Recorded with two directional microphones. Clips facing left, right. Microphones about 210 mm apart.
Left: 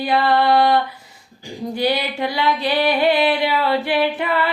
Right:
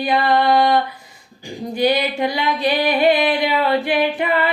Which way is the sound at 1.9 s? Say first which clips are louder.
Right 4 dB; 15° right (ahead or behind).